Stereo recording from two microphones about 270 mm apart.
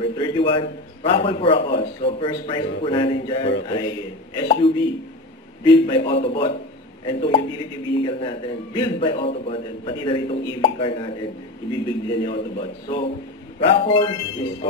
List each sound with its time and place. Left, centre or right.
0.0 s a man's voice: centre